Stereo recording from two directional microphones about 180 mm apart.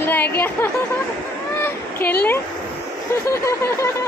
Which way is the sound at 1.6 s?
10° left (ahead or behind).